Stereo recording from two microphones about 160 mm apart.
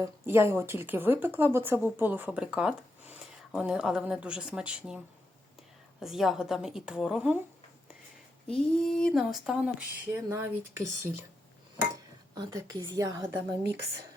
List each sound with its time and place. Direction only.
0.0 s speech: 15° right (ahead or behind)
6.0 s a woman's voice: centre (ahead or behind)
8.4 s a woman's voice: 5° left (ahead or behind)
10.2 s speech: 15° right (ahead or behind)
12.3 s speech: 25° right (ahead or behind)